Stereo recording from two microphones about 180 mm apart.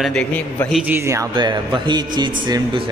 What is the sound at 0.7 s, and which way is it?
Speech, 10° right (ahead or behind).